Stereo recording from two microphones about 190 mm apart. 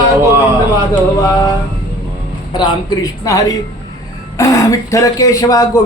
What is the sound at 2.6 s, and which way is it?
Speech, 20° left (ahead or behind).